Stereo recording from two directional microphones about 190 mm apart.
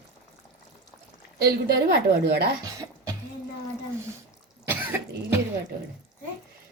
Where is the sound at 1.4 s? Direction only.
55° right (ahead or behind).